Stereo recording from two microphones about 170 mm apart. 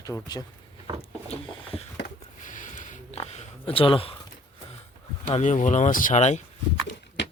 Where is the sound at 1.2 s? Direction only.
35° left (ahead or behind).